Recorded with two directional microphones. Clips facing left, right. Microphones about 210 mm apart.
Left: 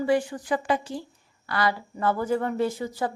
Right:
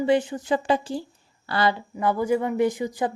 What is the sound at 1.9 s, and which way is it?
Speech, 15° right (ahead or behind).